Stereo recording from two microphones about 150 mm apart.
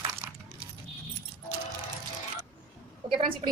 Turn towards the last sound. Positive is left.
turn(degrees=-35)  # may be behind; listen again after turning